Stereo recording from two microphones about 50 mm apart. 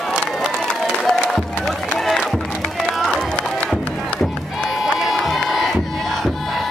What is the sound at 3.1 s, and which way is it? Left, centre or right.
Run, left.